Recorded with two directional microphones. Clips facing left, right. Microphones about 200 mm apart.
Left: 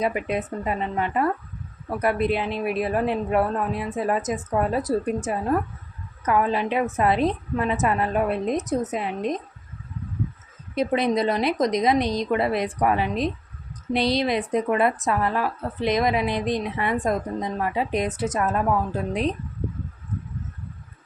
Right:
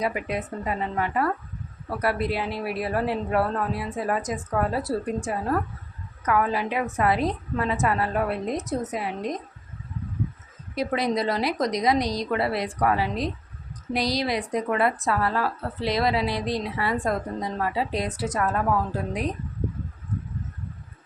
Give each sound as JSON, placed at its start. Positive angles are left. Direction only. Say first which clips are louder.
{"t": 0.0, "sound": "a woman's voice", "louder": "left 3 dB", "side_deg": 25}
{"t": 10.8, "sound": "a woman's voice", "louder": "left 3 dB", "side_deg": 20}